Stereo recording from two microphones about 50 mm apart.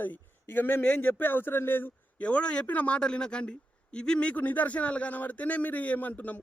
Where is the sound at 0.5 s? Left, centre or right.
Left.